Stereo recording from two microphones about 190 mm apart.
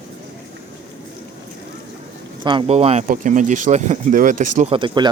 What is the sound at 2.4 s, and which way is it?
Speech, 25° right (ahead or behind).